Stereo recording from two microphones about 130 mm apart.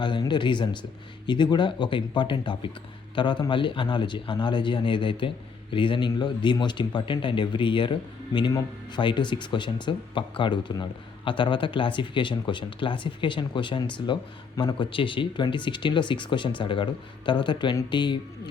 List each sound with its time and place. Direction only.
0.0 s speech: 35° left (ahead or behind)